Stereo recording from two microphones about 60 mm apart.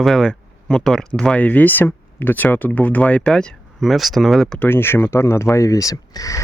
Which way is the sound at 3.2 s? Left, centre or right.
Centre.